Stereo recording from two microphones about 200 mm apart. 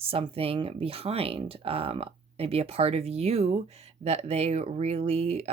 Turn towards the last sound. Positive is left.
turn(degrees=-30)  # may be behind; listen again after turning